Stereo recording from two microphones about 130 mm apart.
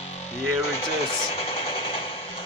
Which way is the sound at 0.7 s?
45° left (ahead or behind).